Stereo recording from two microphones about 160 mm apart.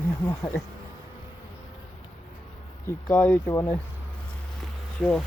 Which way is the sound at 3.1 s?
15° left (ahead or behind).